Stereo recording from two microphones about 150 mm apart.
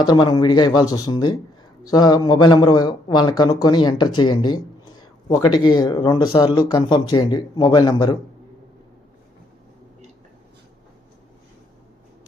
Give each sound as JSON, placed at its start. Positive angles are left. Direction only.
{"t": 0.0, "sound": "a man's voice", "side_deg": 30}